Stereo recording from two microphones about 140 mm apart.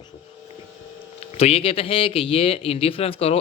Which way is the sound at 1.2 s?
50° left (ahead or behind).